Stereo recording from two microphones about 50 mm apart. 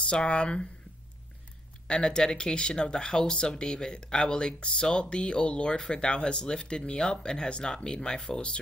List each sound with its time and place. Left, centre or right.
0.0 s speech: left
1.9 s speech: centre